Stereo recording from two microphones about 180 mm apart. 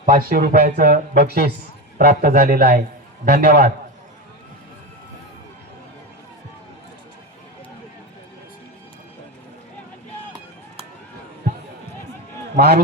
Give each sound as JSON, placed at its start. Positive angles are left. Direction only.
{"t": 0.0, "sound": "speech", "side_deg": -50}
{"t": 12.5, "sound": "a man's voice", "side_deg": -60}